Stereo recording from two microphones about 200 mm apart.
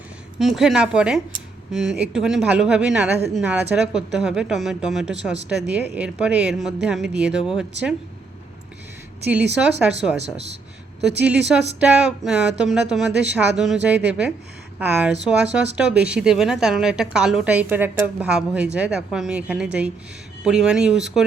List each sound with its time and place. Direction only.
0.3 s a woman's voice: centre (ahead or behind)
9.2 s a woman's voice: 5° right (ahead or behind)
10.2 s speech: 30° right (ahead or behind)
11.2 s a woman's voice: 5° right (ahead or behind)